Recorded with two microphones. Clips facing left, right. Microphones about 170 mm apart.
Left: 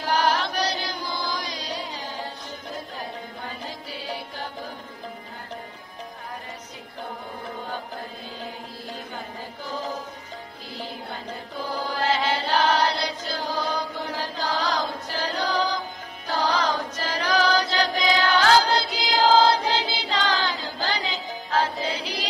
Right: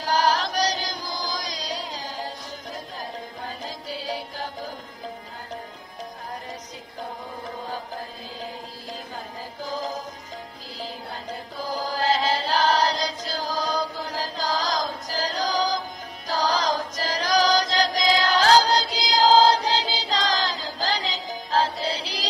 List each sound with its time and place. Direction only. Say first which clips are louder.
0.0 s chant: right 1 dB; 40° right (ahead or behind)
3.4 s music: right 1 dB; 40° right (ahead or behind)
9.6 s music: right 2 dB; 40° right (ahead or behind)
11.6 s chant: right 1 dB; 40° right (ahead or behind)
16.3 s music: even; 40° right (ahead or behind)